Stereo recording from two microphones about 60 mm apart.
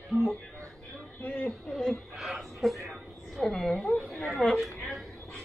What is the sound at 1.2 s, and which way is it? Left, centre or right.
Chatter, left.